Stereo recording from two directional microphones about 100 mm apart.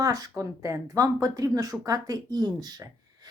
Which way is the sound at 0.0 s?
40° right (ahead or behind).